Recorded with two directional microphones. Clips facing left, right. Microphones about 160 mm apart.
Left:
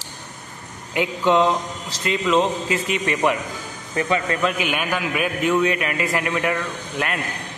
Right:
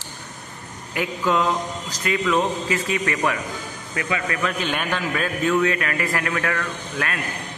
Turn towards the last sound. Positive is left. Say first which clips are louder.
# left 2 dB
turn(degrees=20)  # may be behind; listen again after turning